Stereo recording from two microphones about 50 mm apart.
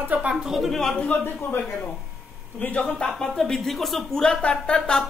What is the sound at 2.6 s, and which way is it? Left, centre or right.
Speech, left.